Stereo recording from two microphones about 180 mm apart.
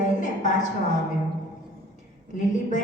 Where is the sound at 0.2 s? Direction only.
45° left (ahead or behind).